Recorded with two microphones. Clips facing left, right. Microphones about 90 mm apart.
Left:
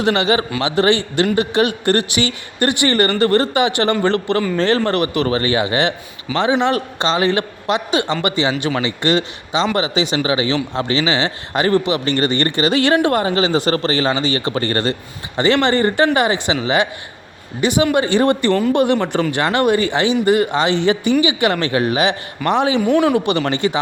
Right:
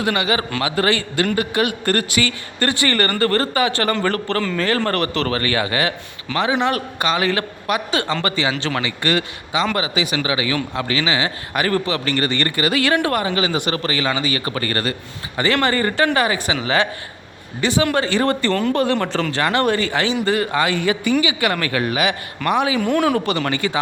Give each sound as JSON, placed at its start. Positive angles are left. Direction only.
{"t": 0.0, "sound": "a man's voice", "side_deg": 30}
{"t": 4.9, "sound": "a man's voice", "side_deg": 15}
{"t": 22.8, "sound": "speech", "side_deg": 0}
{"t": 23.1, "sound": "a man's voice", "side_deg": 20}